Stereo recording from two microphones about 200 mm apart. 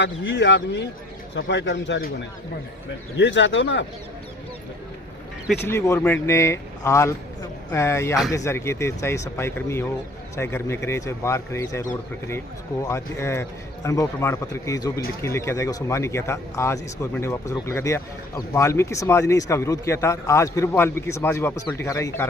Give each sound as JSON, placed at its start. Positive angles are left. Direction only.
{"t": 0.0, "sound": "speech", "side_deg": 65}
{"t": 3.2, "sound": "speech", "side_deg": 65}
{"t": 5.6, "sound": "speech", "side_deg": 15}